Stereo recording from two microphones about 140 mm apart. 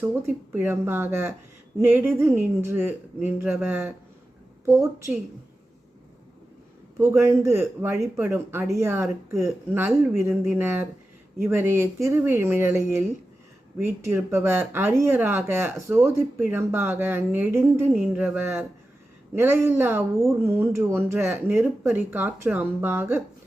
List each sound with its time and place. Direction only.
0.0 s a man's voice: 15° right (ahead or behind)
7.2 s a man's voice: 20° right (ahead or behind)